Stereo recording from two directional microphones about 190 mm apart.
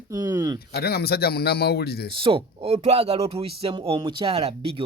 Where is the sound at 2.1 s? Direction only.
30° right (ahead or behind).